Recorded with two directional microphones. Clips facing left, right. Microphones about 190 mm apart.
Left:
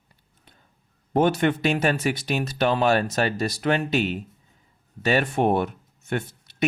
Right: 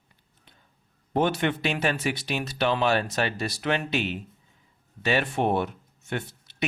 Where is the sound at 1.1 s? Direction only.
45° left (ahead or behind).